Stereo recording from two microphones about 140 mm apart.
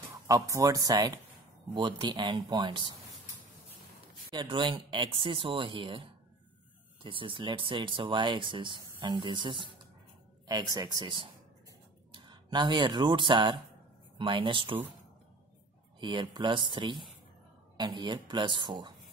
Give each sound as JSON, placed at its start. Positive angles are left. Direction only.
{"t": 0.1, "sound": "speech", "side_deg": -20}
{"t": 4.3, "sound": "speech", "side_deg": -35}
{"t": 16.0, "sound": "speech", "side_deg": -35}